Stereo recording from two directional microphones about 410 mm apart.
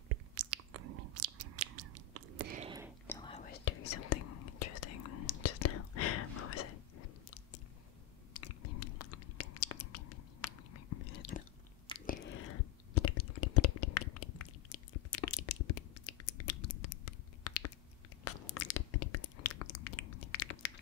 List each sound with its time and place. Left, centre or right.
0.3 s chewing: right
2.5 s whispering: centre
3.1 s whispering: centre; by 6.1 s left
8.3 s a sound: left
11.1 s chewing: left
11.9 s biting: centre
12.9 s a sound: left